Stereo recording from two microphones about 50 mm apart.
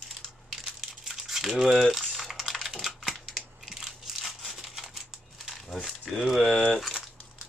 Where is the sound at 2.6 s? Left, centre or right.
Centre.